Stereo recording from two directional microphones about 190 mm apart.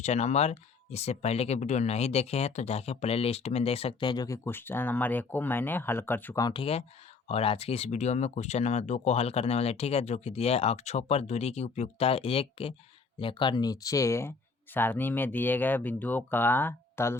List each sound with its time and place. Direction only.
0.0 s speech: 35° left (ahead or behind); by 17.2 s 15° left (ahead or behind)